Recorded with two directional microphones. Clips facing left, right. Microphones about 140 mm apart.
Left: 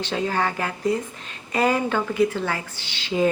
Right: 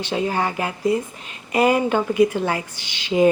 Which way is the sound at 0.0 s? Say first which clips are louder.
Right 2 dB; 15° right (ahead or behind).